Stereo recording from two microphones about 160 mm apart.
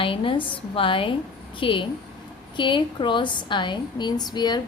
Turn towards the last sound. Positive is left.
turn(degrees=25)  # may be behind; listen again after turning